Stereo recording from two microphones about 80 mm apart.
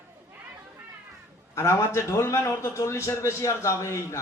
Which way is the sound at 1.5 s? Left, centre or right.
Left.